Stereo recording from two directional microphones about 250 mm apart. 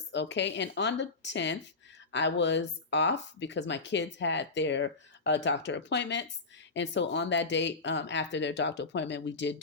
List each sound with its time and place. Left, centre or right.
0.1 s speech: left